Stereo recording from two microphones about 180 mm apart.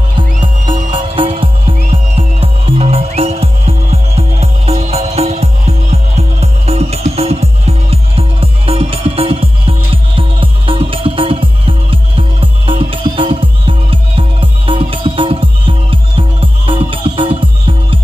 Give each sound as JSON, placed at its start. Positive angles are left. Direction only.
{"t": 0.7, "sound": "music", "side_deg": -35}